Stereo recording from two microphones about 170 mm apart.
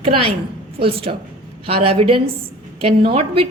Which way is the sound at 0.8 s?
35° right (ahead or behind).